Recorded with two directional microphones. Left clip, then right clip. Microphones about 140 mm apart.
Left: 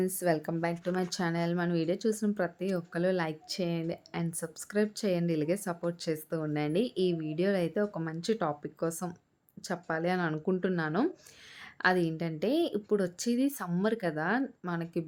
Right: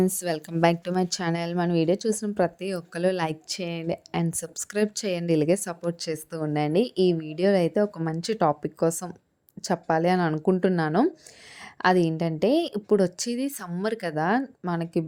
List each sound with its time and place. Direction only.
0.0 s a woman's voice: 50° right (ahead or behind)
0.9 s a woman's voice: 50° right (ahead or behind)